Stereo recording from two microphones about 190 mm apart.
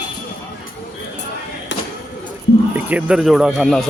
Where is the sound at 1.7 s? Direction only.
70° left (ahead or behind).